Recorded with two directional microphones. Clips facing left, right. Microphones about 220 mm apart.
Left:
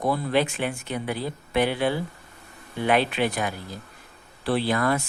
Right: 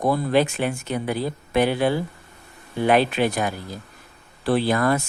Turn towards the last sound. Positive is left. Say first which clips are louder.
# right 3 dB
turn(degrees=-45)  # may be behind; listen again after turning